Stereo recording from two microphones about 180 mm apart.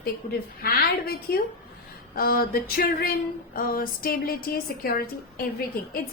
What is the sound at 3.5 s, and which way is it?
A woman's voice, 55° left (ahead or behind).